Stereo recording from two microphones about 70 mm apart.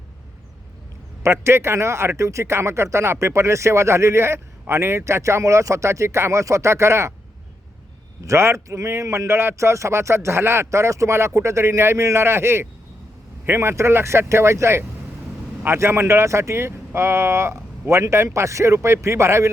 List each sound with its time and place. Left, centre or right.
1.2 s a man's voice: right
8.2 s a man's voice: right